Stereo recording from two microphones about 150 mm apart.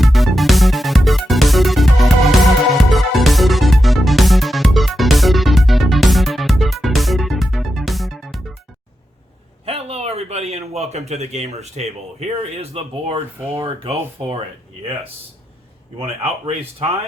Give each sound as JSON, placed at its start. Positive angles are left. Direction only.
{"t": 0.0, "sound": "music", "side_deg": 0}
{"t": 9.6, "sound": "speech", "side_deg": -40}
{"t": 16.0, "sound": "speech", "side_deg": -40}